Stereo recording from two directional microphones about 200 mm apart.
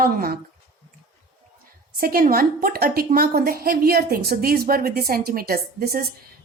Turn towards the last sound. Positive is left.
turn(degrees=-50)  # may be behind; listen again after turning